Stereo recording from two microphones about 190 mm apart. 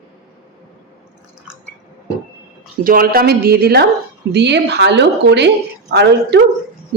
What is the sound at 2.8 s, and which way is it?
Speech, 50° right (ahead or behind).